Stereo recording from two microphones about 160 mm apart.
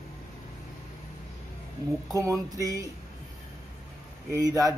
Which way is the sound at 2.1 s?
20° right (ahead or behind).